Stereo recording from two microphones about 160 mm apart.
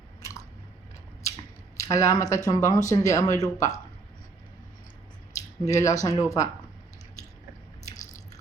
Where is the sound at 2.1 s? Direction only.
20° left (ahead or behind).